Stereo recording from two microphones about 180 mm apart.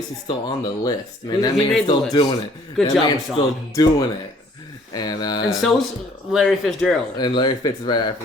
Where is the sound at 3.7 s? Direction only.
20° left (ahead or behind).